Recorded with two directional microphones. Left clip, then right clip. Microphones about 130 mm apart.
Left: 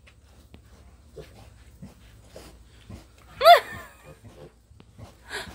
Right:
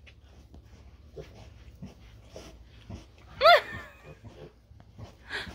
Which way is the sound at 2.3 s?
10° right (ahead or behind).